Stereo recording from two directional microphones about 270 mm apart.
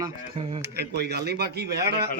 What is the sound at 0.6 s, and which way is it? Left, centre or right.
Speech, right.